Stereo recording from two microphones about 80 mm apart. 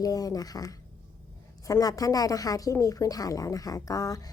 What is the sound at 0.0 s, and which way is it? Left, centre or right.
A woman's voice, left.